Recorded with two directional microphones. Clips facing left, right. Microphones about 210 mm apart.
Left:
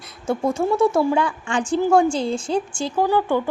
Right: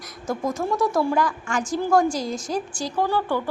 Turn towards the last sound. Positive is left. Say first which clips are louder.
# left 4 dB
turn(degrees=15)  # may be behind; listen again after turning